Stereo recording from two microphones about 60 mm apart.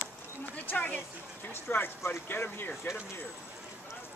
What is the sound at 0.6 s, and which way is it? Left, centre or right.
A woman's voice, left.